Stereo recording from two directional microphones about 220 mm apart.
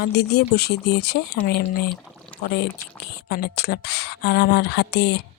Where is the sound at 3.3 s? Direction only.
45° left (ahead or behind).